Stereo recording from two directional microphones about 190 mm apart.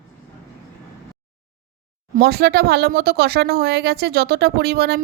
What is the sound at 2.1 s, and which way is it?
Speech, 55° right (ahead or behind).